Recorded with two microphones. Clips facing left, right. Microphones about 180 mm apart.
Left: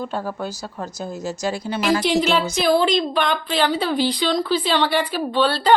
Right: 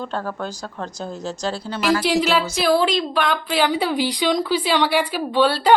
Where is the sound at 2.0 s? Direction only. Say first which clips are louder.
Even; 5° right (ahead or behind).